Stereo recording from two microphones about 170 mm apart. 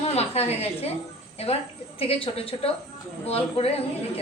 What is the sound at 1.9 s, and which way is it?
A woman's voice, 35° left (ahead or behind).